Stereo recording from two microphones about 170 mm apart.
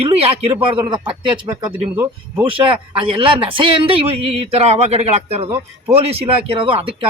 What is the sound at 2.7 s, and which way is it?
Speech, 30° right (ahead or behind).